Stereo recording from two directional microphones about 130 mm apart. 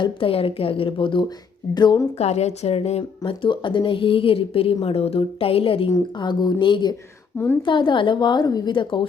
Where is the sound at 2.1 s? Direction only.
55° left (ahead or behind); by 6.9 s 35° left (ahead or behind).